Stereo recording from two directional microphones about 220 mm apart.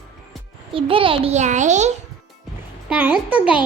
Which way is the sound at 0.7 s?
25° right (ahead or behind).